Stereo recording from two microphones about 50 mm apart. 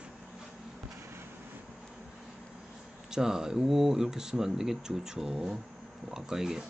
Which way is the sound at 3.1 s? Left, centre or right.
Centre.